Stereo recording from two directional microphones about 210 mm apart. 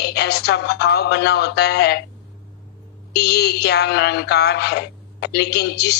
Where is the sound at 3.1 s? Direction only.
50° left (ahead or behind).